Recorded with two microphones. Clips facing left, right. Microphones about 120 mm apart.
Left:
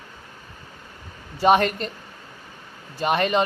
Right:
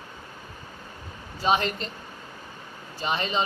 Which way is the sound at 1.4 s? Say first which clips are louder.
Left 6 dB; 60° left (ahead or behind).